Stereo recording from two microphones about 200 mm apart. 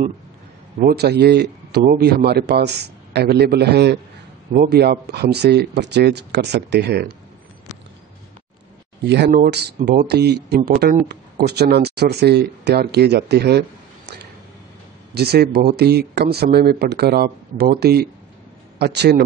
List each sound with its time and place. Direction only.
0.7 s a man's voice: 50° right (ahead or behind)
9.0 s a man's voice: 55° right (ahead or behind)